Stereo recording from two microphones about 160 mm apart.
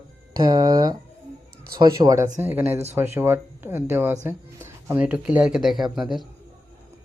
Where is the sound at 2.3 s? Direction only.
10° right (ahead or behind).